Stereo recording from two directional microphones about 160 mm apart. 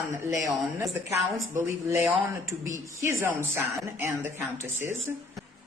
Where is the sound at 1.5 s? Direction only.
15° right (ahead or behind).